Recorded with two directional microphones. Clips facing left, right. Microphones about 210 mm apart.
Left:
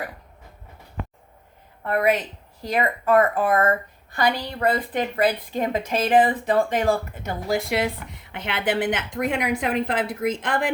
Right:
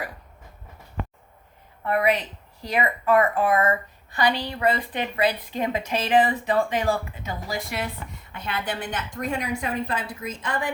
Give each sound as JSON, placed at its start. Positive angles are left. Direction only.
{"t": 1.9, "sound": "a woman's voice", "side_deg": 45}